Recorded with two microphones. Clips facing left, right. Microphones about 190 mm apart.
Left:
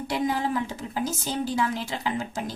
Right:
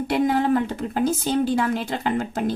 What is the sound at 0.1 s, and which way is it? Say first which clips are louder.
A woman's voice: right 6 dB; 60° right (ahead or behind).